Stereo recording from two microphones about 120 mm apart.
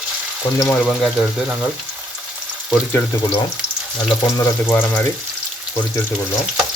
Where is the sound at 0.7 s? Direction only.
Centre (ahead or behind).